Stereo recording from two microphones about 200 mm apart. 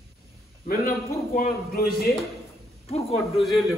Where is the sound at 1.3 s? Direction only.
45° left (ahead or behind).